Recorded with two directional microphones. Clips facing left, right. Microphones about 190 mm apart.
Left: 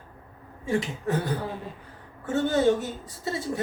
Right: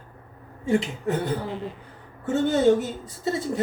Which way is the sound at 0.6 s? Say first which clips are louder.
Right 4 dB; 25° right (ahead or behind).